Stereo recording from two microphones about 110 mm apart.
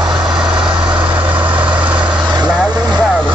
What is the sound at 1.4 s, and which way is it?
Vehicle, 50° right (ahead or behind).